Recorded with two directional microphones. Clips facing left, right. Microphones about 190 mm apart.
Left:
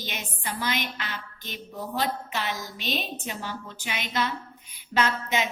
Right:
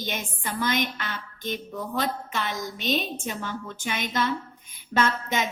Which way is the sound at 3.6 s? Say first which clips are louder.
Right 4 dB; 50° right (ahead or behind).